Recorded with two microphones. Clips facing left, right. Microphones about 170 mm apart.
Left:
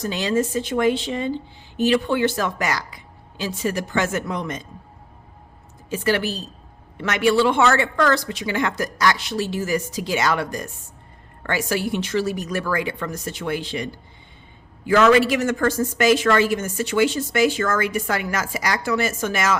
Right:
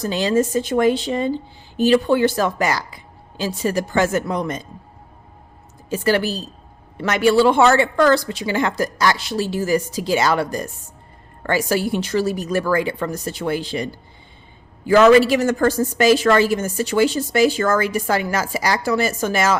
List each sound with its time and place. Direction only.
0.0 s a woman's voice: 35° right (ahead or behind)
5.9 s a woman's voice: 35° right (ahead or behind)